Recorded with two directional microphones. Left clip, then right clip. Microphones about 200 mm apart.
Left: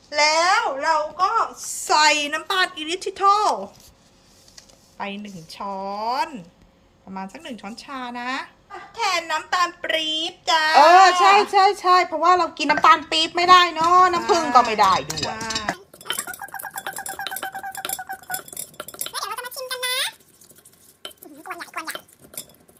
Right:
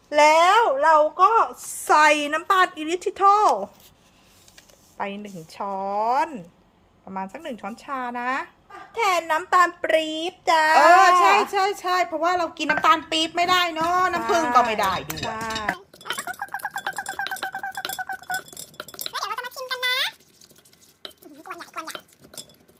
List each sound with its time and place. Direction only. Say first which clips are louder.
0.1 s speech: right 3 dB; 45° right (ahead or behind)
0.9 s a child's voice: right 5 dB; 30° right (ahead or behind)
4.9 s a child's voice: right 1 dB; 20° right (ahead or behind)
8.9 s a child's voice: right 2 dB; 40° right (ahead or behind)
10.8 s a woman's voice: left 2 dB; 5° right (ahead or behind)
15.4 s bird: even; 5° right (ahead or behind)
18.3 s chink: right 3 dB; 15° right (ahead or behind)
21.0 s gargling: left 2 dB; 5° right (ahead or behind)